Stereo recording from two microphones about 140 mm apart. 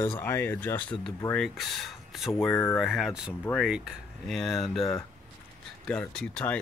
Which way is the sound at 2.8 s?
Centre (ahead or behind).